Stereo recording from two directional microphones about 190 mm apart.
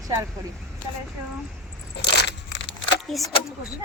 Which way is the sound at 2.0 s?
65° left (ahead or behind).